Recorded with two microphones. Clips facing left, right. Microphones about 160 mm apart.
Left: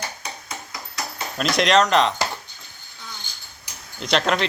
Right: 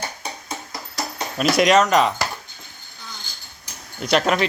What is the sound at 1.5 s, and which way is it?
Speech, 5° right (ahead or behind).